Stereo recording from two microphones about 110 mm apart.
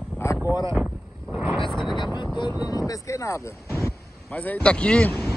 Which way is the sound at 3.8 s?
15° left (ahead or behind).